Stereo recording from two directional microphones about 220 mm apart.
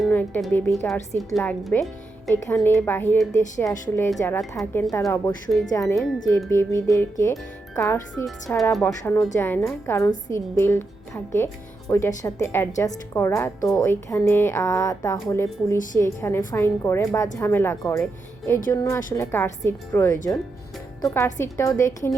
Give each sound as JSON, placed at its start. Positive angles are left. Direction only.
{"t": 0.0, "sound": "a woman's voice", "side_deg": 10}
{"t": 8.4, "sound": "speech", "side_deg": 0}